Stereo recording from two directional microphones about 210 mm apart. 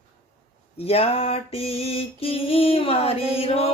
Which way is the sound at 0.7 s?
30° left (ahead or behind).